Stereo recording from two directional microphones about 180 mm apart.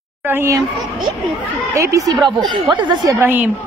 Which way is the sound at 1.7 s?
15° right (ahead or behind).